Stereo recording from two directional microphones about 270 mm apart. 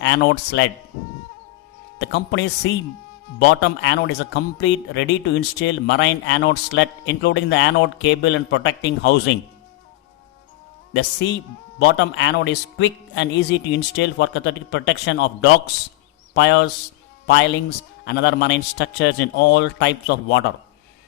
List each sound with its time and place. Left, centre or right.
0.0 s a man's voice: left
2.0 s a man's voice: left
10.9 s a man's voice: left